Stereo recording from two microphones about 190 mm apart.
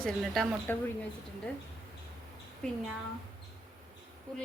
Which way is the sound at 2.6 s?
5° left (ahead or behind).